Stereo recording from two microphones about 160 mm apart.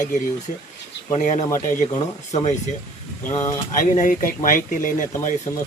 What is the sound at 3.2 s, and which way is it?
Speech, 15° left (ahead or behind).